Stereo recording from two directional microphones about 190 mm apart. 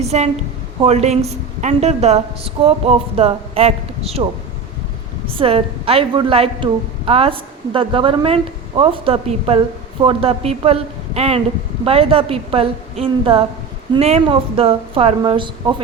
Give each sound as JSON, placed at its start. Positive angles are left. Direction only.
{"t": 0.0, "sound": "a woman's voice", "side_deg": -35}
{"t": 5.4, "sound": "a woman's voice", "side_deg": -30}